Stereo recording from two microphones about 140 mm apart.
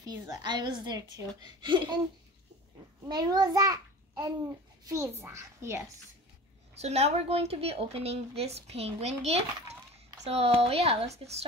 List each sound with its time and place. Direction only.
0.0 s a woman's voice: 30° right (ahead or behind)
3.1 s a child's voice: 30° right (ahead or behind)
6.7 s a woman's voice: 50° right (ahead or behind)